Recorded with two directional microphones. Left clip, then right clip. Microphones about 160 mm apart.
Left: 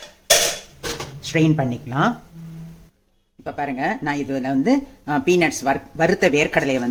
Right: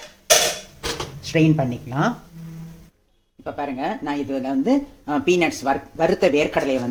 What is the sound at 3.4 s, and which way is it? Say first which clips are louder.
Speech: left 2 dB; 15° left (ahead or behind).